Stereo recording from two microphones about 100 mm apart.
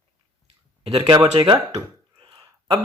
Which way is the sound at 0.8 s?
65° right (ahead or behind).